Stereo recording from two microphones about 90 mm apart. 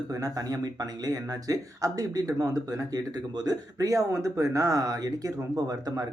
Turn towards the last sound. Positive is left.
turn(degrees=-40)  # may be behind; listen again after turning